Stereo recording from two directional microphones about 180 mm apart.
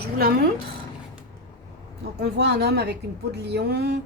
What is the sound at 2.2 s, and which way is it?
A woman's voice, 65° right (ahead or behind).